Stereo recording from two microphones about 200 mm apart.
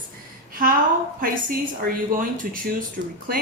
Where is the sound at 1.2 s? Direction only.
45° right (ahead or behind).